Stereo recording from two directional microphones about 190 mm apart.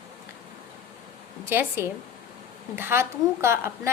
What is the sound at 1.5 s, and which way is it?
A woman's voice, 10° right (ahead or behind).